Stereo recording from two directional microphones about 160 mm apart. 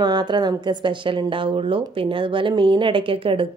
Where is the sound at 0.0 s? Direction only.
25° right (ahead or behind).